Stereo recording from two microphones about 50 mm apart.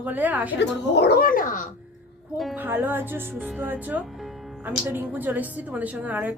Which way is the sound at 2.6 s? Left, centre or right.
Right.